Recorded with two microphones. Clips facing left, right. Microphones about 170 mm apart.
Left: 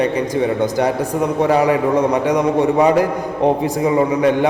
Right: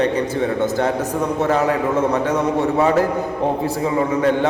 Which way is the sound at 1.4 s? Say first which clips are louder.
Left 4 dB; 10° left (ahead or behind).